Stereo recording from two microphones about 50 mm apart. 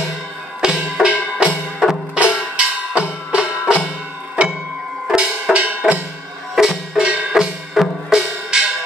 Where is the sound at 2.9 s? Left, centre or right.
Right.